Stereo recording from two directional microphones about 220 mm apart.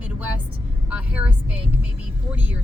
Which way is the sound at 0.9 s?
5° right (ahead or behind).